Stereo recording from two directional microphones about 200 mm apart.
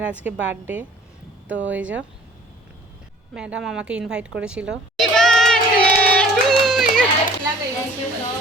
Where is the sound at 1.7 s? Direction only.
5° right (ahead or behind).